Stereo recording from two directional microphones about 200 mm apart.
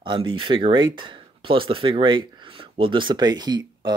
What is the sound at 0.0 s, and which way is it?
Speech, 25° right (ahead or behind).